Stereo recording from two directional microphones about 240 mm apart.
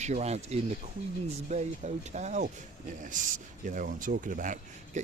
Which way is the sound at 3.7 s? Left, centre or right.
Right.